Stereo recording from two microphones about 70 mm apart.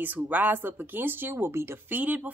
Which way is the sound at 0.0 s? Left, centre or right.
Right.